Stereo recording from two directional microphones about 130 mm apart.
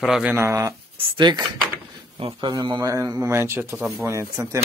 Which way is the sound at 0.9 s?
35° right (ahead or behind).